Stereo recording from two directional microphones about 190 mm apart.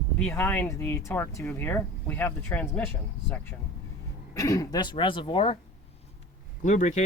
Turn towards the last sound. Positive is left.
turn(degrees=40)  # may be behind; listen again after turning